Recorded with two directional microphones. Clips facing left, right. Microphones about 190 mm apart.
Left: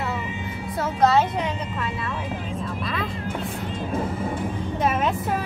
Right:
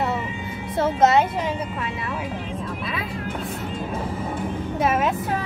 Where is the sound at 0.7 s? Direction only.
25° right (ahead or behind).